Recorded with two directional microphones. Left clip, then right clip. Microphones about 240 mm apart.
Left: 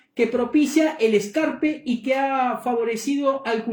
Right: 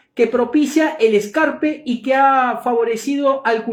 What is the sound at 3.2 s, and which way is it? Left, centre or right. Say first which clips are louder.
Speech: right 7 dB; centre.